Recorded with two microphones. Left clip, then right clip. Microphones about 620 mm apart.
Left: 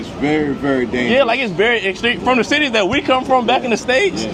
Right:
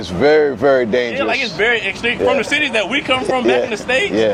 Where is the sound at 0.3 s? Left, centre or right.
Right.